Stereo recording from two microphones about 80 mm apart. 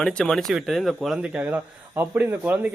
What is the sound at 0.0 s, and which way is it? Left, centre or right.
Speech, centre.